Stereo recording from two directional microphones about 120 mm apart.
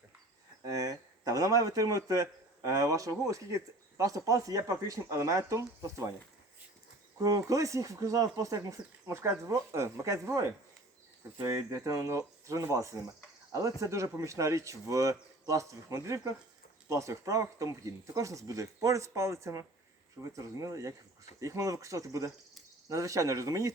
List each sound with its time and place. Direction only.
0.6 s speech: 30° right (ahead or behind)
7.2 s speech: 30° right (ahead or behind)